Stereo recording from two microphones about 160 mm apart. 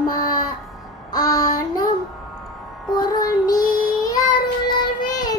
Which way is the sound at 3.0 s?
25° left (ahead or behind).